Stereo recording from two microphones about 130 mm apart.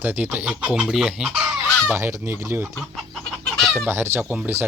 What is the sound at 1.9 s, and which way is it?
Speech, 20° right (ahead or behind).